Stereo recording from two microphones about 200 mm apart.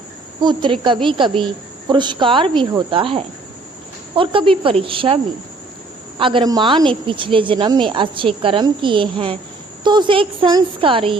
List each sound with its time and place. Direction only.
0.4 s a woman's voice: 25° right (ahead or behind)